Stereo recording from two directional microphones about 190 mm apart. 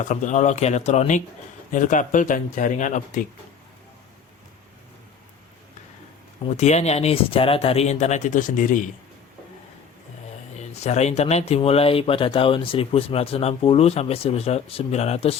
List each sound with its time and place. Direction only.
0.0 s speech: 40° left (ahead or behind)
6.4 s speech: 35° left (ahead or behind)
10.8 s speech: 35° left (ahead or behind)